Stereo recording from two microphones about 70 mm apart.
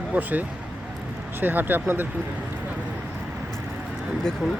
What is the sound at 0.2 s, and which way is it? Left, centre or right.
Speech, right.